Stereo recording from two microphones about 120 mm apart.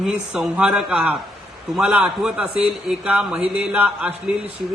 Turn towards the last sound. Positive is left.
turn(degrees=-10)  # may be behind; listen again after turning